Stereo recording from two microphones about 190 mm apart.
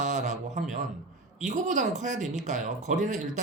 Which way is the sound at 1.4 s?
40° right (ahead or behind).